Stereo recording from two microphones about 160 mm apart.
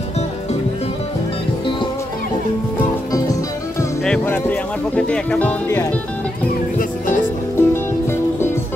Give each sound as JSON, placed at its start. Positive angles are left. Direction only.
{"t": 2.8, "sound": "music", "side_deg": 20}
{"t": 4.0, "sound": "speech", "side_deg": 10}
{"t": 7.5, "sound": "music", "side_deg": 15}